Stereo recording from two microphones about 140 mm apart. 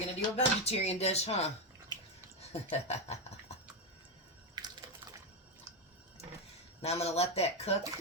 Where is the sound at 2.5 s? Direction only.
50° left (ahead or behind).